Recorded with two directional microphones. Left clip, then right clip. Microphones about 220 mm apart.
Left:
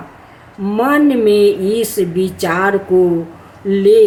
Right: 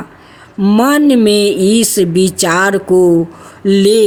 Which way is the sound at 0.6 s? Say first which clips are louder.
Right 2 dB; 50° right (ahead or behind).